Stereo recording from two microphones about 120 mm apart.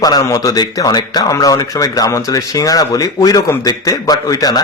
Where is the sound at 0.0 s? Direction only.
30° left (ahead or behind).